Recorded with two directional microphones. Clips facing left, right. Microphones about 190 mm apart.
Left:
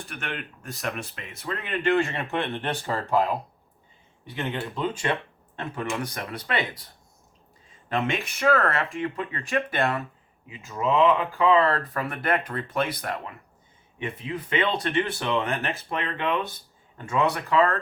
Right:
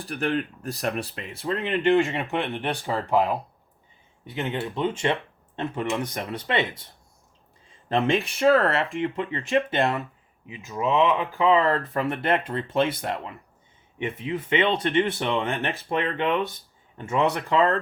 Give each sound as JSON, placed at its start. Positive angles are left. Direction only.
{"t": 0.0, "sound": "speech", "side_deg": -35}
{"t": 4.4, "sound": "speech", "side_deg": -20}